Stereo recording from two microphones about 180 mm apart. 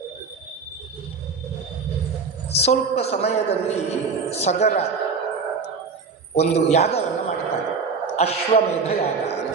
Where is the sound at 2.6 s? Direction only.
35° left (ahead or behind).